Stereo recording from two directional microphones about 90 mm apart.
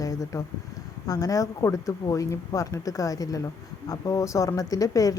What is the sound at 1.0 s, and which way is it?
Speech, 45° left (ahead or behind).